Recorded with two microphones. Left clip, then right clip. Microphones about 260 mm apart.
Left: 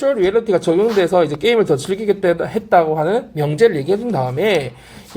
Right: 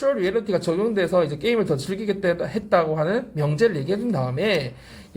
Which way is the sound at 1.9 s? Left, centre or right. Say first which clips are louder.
Left 7 dB; left.